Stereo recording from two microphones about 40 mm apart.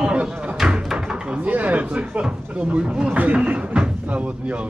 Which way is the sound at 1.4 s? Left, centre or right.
Right.